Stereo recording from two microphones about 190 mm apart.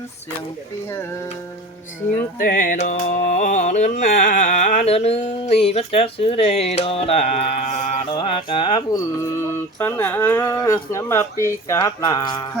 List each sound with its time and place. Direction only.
2.1 s music: 45° left (ahead or behind)
8.1 s mantra: 25° left (ahead or behind)